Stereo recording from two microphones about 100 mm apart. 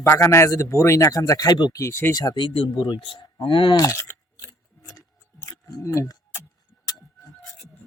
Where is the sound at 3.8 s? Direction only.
30° left (ahead or behind).